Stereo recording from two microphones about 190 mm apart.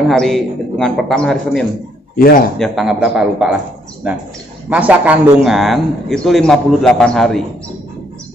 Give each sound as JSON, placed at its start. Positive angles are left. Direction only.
{"t": 0.1, "sound": "a man's voice", "side_deg": 0}
{"t": 2.1, "sound": "a man's voice", "side_deg": 50}
{"t": 2.6, "sound": "a man's voice", "side_deg": 0}